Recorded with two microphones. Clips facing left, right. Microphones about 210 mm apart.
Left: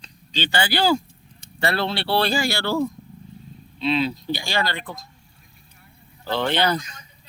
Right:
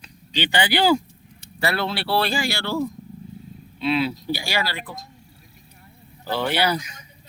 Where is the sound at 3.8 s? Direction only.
10° right (ahead or behind).